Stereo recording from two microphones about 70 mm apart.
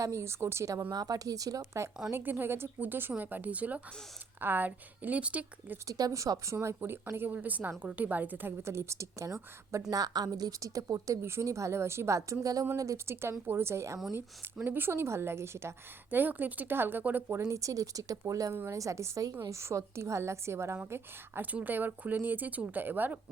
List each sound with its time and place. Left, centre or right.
0.0 s speech: right
0.9 s speech: right
2.1 s speech: right
5.9 s speech: right
8.6 s a woman's voice: right
9.9 s a woman's voice: right
14.1 s speech: right
17.5 s speech: right
18.5 s a woman's voice: right
21.4 s speech: right